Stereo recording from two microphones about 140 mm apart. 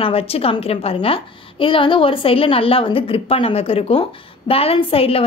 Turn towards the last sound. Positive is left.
turn(degrees=45)  # may be behind; listen again after turning